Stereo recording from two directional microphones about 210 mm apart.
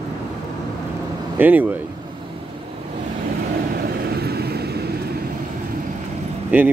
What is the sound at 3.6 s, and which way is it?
Vehicle, 45° right (ahead or behind).